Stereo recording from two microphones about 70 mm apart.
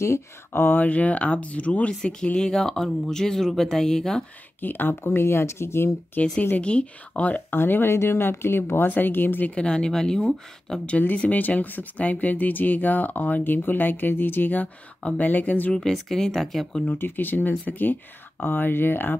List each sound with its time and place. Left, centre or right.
0.5 s speech: left; by 4.2 s centre
4.6 s speech: left
6.2 s speech: left
7.5 s speech: left
9.7 s speech: centre
10.9 s speech: left
15.7 s speech: centre
16.9 s speech: left